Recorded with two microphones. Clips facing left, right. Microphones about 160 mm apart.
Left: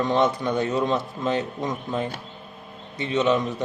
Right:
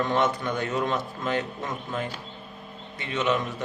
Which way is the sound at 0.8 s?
15° left (ahead or behind).